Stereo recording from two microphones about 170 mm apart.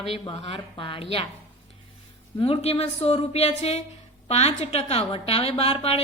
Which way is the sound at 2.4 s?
35° left (ahead or behind).